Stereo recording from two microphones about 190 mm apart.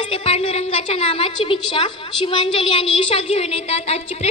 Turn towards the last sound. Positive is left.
turn(degrees=30)  # may be behind; listen again after turning